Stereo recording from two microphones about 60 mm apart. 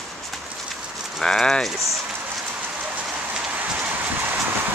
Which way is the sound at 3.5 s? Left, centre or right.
Right.